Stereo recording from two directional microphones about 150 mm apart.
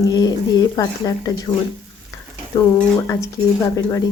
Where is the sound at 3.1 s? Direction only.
20° left (ahead or behind).